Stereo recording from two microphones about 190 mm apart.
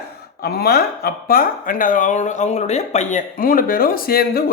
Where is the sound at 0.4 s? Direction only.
55° left (ahead or behind).